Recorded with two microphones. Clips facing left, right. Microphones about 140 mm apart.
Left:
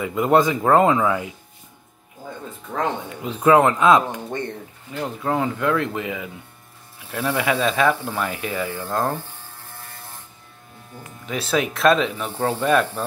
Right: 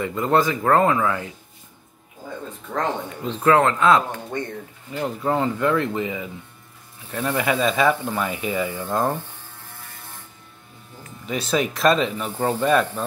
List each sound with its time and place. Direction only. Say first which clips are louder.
0.0 s speech: left 2 dB; 15° left (ahead or behind)
3.3 s speech: left 2 dB; 15° left (ahead or behind)
4.9 s speech: right 1 dB; centre (ahead or behind)
11.2 s speech: even; centre (ahead or behind)